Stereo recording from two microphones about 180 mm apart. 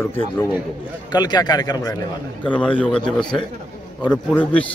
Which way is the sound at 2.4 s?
10° left (ahead or behind).